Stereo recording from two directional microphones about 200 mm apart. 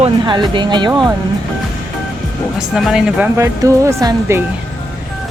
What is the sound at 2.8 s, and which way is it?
Speech, centre (ahead or behind).